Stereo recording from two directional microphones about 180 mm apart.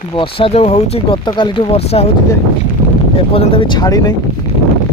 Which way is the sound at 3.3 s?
30° left (ahead or behind).